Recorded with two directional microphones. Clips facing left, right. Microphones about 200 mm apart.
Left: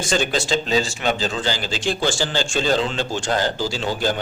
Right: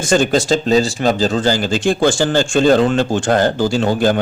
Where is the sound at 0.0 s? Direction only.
50° right (ahead or behind).